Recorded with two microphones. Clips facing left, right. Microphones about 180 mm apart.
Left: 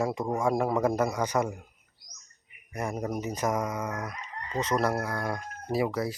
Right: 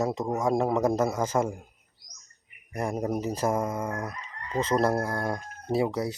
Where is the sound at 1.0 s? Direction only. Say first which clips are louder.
Right 2 dB; 25° right (ahead or behind).